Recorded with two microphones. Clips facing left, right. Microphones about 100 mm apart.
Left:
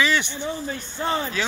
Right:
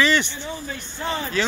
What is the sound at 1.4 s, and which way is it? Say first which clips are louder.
Speech: right 7 dB; 10° left (ahead or behind).